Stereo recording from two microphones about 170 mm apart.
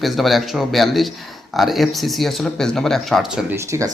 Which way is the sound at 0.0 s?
Centre (ahead or behind).